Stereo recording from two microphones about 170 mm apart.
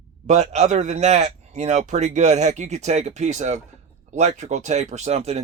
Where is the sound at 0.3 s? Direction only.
45° right (ahead or behind).